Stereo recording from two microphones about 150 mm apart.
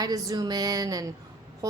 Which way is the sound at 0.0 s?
25° right (ahead or behind).